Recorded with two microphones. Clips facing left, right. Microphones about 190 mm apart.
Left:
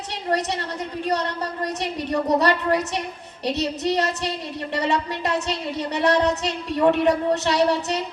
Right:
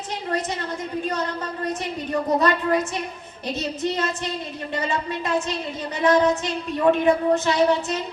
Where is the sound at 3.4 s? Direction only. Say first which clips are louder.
Left 3 dB; 75° left (ahead or behind).